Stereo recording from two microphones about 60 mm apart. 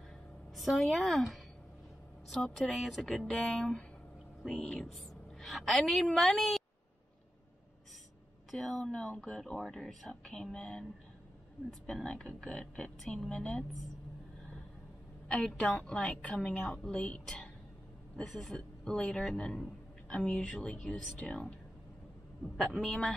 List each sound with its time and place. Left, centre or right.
0.6 s speech: centre
8.5 s a man's voice: centre
15.2 s a man's voice: centre
22.6 s speech: centre